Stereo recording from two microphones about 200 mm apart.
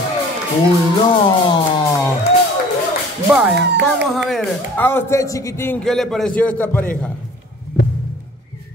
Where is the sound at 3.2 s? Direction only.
5° right (ahead or behind).